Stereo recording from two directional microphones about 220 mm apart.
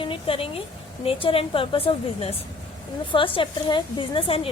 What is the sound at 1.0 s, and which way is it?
A woman's voice, 25° left (ahead or behind).